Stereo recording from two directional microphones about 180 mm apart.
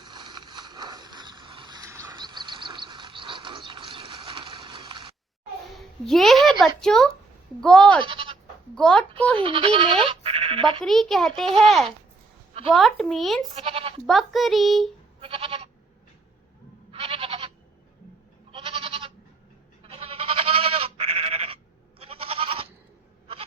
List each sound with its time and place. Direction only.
0.0 s a sound: 25° right (ahead or behind)
5.7 s a woman's voice: centre (ahead or behind)
8.0 s bleat: 30° right (ahead or behind)
8.7 s a child's voice: 5° left (ahead or behind)
9.4 s speech: 30° right (ahead or behind)
10.8 s a child's voice: centre (ahead or behind)
13.6 s bleat: 30° right (ahead or behind)
14.3 s a child's voice: centre (ahead or behind)
15.2 s goat: 30° right (ahead or behind)
16.9 s goat: 30° right (ahead or behind)
18.5 s goat: 30° right (ahead or behind)